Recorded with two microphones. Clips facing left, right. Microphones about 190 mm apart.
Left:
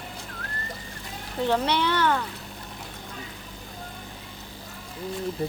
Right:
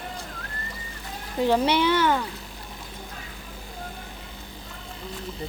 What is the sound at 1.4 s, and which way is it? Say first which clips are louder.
Speech: right 3 dB; 10° right (ahead or behind).